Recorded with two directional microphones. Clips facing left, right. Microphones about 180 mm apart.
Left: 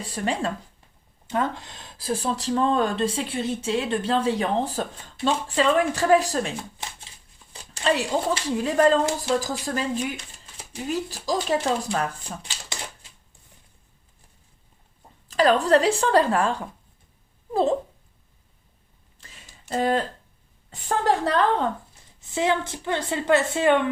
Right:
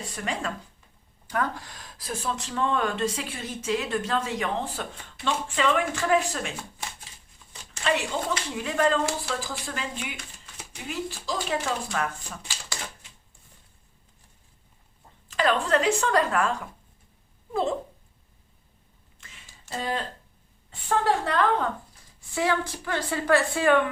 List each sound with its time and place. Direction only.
0.1 s speech: 30° left (ahead or behind)
7.7 s speech: 35° left (ahead or behind)
12.5 s typewriter: 20° left (ahead or behind)
15.3 s speech: 35° left (ahead or behind)
17.5 s a sound: 35° left (ahead or behind)
19.2 s a sound: 35° left (ahead or behind)
19.7 s speech: 55° left (ahead or behind)
20.7 s speech: 40° left (ahead or behind)
22.2 s a woman's voice: 20° left (ahead or behind)